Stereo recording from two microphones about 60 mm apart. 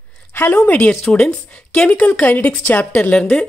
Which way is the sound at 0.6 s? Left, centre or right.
Left.